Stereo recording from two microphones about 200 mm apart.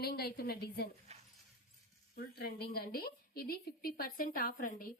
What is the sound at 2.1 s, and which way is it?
A woman's voice, 50° left (ahead or behind).